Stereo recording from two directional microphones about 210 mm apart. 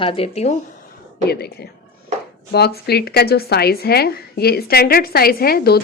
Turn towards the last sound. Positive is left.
turn(degrees=45)  # may be behind; listen again after turning